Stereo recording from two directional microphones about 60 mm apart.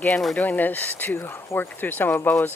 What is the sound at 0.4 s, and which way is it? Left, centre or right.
Speech, left.